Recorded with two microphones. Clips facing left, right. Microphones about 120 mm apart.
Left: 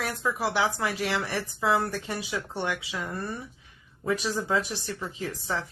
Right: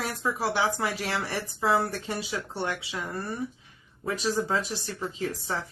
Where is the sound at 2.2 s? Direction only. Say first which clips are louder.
Even; 20° left (ahead or behind).